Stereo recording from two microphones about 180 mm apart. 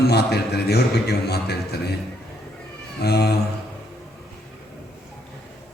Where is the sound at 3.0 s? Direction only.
65° left (ahead or behind).